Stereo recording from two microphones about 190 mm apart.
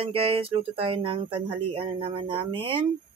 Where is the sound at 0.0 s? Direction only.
30° right (ahead or behind).